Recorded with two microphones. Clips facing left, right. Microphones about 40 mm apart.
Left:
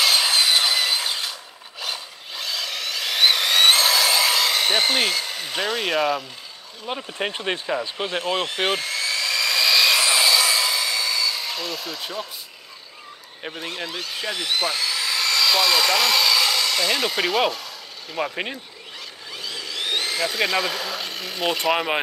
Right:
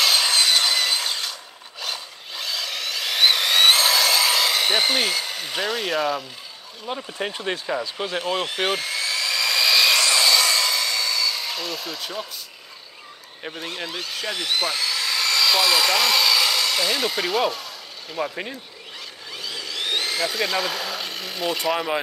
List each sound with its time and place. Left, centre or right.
0.0 s wood: centre
7.2 s speech: left
8.2 s a sound: centre
10.0 s hair dryer: centre
13.4 s speech: centre
18.1 s speech: centre
19.3 s a sound: centre